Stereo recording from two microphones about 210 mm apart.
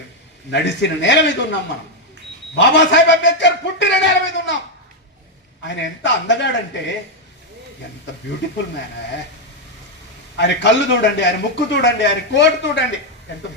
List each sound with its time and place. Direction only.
0.5 s a man's voice: 55° left (ahead or behind)
2.6 s a man's voice: 55° left (ahead or behind)
5.6 s a man's voice: 60° left (ahead or behind)
10.3 s a man's voice: 55° left (ahead or behind)